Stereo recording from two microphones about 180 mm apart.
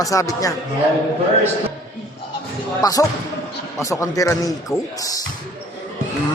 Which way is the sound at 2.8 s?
20° left (ahead or behind).